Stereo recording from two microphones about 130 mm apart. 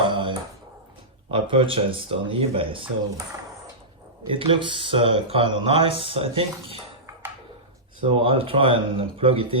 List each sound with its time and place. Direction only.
0.0 s a sound: 40° right (ahead or behind)
1.3 s speech: 45° right (ahead or behind)
4.3 s speech: 40° right (ahead or behind)
8.0 s speech: 45° right (ahead or behind)